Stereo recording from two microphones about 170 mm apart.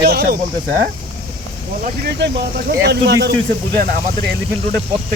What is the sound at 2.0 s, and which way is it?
Speech, 85° right.